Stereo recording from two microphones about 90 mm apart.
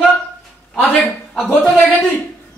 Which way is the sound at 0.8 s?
15° left (ahead or behind).